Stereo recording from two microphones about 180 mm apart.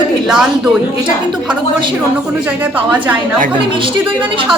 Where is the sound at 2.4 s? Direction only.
10° right (ahead or behind).